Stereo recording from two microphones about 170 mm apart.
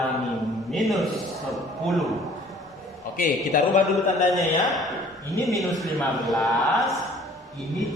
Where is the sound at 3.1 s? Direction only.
50° left (ahead or behind).